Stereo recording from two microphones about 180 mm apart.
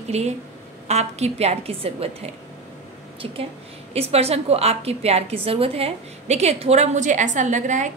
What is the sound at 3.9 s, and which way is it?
A woman's voice, 35° right (ahead or behind).